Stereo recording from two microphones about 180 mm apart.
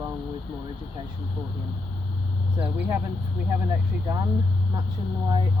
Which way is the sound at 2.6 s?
10° right (ahead or behind).